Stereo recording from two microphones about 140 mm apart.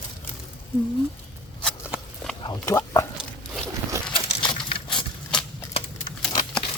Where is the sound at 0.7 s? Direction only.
15° left (ahead or behind).